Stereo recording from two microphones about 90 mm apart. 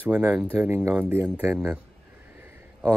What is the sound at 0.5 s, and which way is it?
Speech, 30° right (ahead or behind).